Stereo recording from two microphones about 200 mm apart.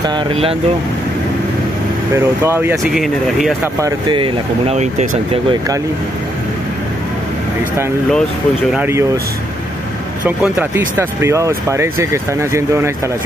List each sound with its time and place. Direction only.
0.0 s speech: 25° right (ahead or behind)
2.1 s speech: 10° right (ahead or behind)
2.8 s speech: centre (ahead or behind)
3.6 s speech: 20° right (ahead or behind)
8.7 s speech: 10° right (ahead or behind)
10.2 s speech: 10° right (ahead or behind)